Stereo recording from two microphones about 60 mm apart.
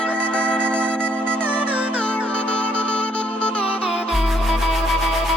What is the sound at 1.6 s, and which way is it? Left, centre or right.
Music, right.